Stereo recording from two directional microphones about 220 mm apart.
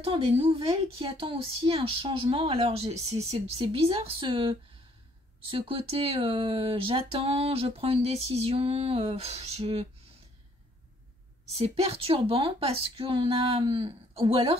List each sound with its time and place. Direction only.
0.0 s a woman's voice: 25° right (ahead or behind)
11.5 s a woman's voice: 30° right (ahead or behind)